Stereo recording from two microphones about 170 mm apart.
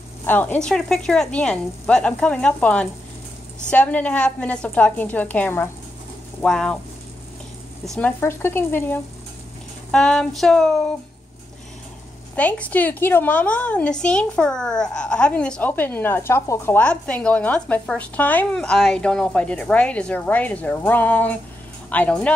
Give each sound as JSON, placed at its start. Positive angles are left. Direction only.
{"t": 0.2, "sound": "a woman's voice", "side_deg": 10}
{"t": 7.8, "sound": "speech", "side_deg": 0}
{"t": 8.2, "sound": "a woman's voice", "side_deg": 15}
{"t": 12.4, "sound": "a woman's voice", "side_deg": 10}